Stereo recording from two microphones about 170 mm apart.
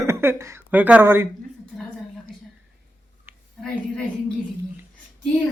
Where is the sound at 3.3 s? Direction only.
10° right (ahead or behind).